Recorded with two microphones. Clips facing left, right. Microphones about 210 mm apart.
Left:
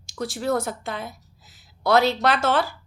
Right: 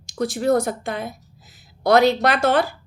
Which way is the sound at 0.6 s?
15° right (ahead or behind).